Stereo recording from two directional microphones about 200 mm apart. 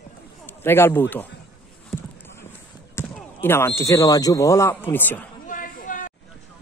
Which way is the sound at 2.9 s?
10° left (ahead or behind).